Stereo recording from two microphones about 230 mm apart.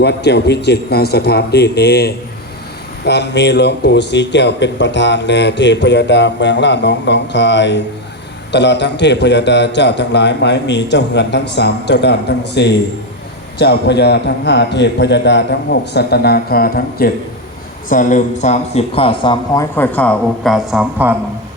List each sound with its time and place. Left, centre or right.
0.0 s a man's voice: left
19.7 s a woman's voice: centre